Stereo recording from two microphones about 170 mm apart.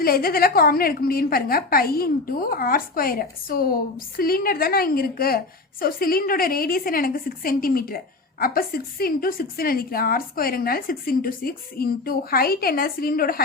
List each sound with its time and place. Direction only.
0.0 s a woman's voice: 60° left (ahead or behind)